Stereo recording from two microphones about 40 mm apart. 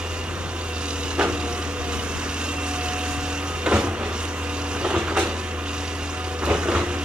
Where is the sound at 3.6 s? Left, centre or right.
Right.